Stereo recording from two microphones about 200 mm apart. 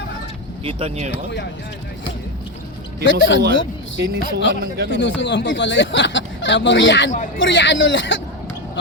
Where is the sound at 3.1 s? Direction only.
65° left (ahead or behind).